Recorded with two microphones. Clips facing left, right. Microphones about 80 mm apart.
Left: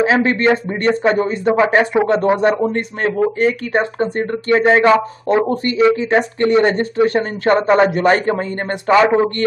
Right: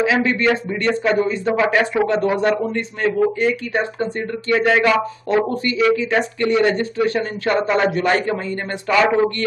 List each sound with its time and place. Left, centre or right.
0.0 s speech: left
0.8 s speech: left
1.4 s speech: left
2.7 s a man's voice: left